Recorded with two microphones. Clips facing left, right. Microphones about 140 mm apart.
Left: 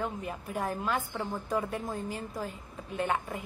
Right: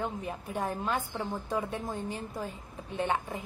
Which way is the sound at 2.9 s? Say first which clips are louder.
Even; 30° right (ahead or behind).